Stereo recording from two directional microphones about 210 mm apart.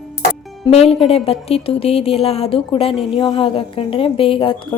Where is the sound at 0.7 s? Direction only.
30° left (ahead or behind).